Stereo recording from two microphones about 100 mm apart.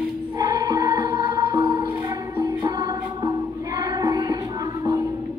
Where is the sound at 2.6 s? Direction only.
45° right (ahead or behind).